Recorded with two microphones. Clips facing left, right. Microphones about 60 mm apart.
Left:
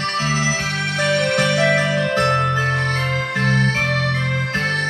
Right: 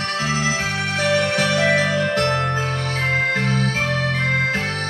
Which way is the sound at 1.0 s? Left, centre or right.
Left.